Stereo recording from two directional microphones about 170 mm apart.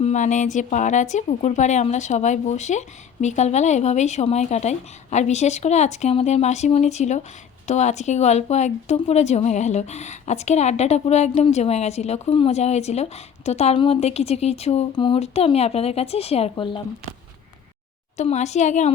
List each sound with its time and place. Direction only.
0.0 s a woman's voice: 45° left (ahead or behind); by 16.8 s 30° left (ahead or behind)
18.2 s a woman's voice: 40° left (ahead or behind)